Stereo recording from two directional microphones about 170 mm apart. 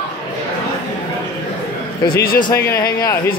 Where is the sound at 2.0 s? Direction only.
60° left (ahead or behind).